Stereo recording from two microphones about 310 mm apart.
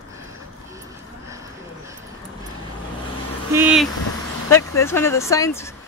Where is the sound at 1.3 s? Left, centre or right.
Centre.